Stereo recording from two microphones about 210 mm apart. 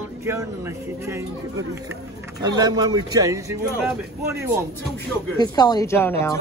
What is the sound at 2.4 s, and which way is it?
A man's voice, 20° right (ahead or behind).